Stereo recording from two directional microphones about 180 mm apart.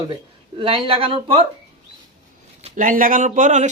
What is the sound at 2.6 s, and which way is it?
Speech, 45° right (ahead or behind).